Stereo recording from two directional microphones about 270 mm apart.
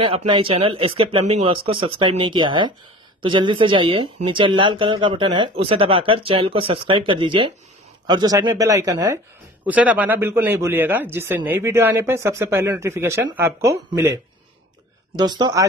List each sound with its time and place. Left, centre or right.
0.3 s speech: centre